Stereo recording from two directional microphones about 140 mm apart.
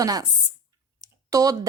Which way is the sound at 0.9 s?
25° right (ahead or behind).